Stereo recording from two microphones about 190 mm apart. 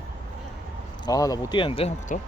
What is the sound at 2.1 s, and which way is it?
Speech, 40° left (ahead or behind).